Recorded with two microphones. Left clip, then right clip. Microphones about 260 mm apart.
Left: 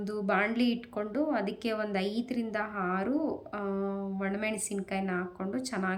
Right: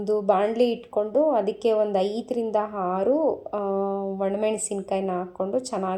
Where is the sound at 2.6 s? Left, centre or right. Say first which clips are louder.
Right 5 dB; left.